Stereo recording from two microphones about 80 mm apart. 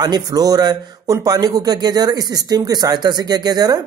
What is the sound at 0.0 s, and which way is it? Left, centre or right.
Speech, right.